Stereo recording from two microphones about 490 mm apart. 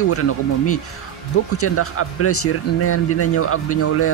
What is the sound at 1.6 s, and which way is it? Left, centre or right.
Speech, left.